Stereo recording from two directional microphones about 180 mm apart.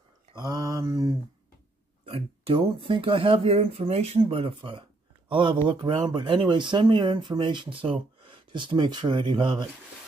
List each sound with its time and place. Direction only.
0.3 s mantra: 20° right (ahead or behind)
2.0 s speech: 30° right (ahead or behind)